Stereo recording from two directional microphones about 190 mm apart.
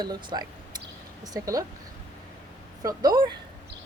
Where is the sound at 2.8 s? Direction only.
20° right (ahead or behind).